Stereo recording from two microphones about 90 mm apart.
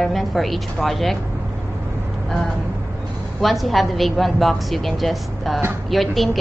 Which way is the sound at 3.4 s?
Centre (ahead or behind).